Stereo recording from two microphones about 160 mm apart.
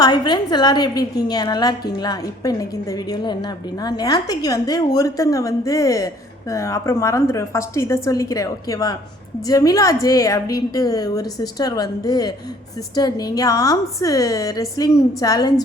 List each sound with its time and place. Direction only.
0.0 s a woman's voice: 25° left (ahead or behind)
3.8 s a woman's voice: 25° left (ahead or behind)